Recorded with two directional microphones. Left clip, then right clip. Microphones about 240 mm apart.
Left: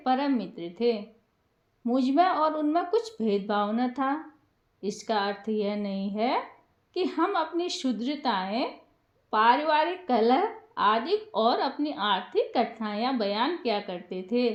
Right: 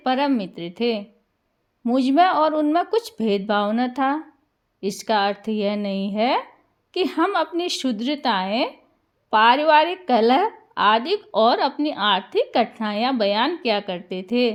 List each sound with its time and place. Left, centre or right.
0.0 s a woman's voice: right